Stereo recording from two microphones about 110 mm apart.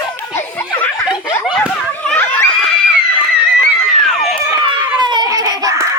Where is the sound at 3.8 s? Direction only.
Centre (ahead or behind).